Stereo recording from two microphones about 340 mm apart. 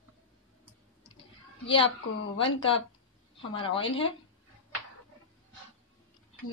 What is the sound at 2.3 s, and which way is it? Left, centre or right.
Speech, centre.